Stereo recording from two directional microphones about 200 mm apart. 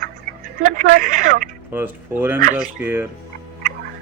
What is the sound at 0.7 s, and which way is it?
Speech, 45° right (ahead or behind).